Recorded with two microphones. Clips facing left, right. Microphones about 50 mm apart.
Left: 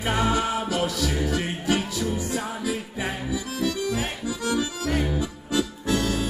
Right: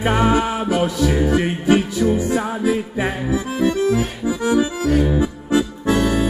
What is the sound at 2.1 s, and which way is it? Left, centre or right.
Accordion, right.